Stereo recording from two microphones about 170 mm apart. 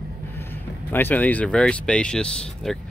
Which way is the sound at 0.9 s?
10° left (ahead or behind).